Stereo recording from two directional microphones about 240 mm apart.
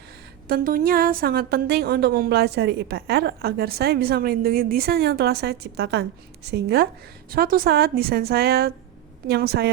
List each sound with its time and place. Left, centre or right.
0.4 s a woman's voice: right